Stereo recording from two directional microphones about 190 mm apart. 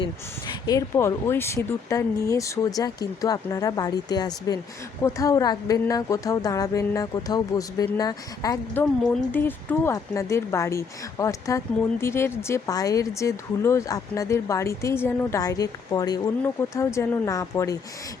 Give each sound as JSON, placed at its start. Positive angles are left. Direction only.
{"t": 0.0, "sound": "speech", "side_deg": 20}
{"t": 8.8, "sound": "speech", "side_deg": 10}